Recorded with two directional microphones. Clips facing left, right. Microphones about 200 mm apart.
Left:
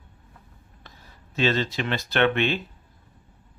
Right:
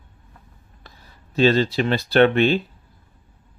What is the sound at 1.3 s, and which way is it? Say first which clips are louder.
Speech: right 7 dB; 35° right (ahead or behind).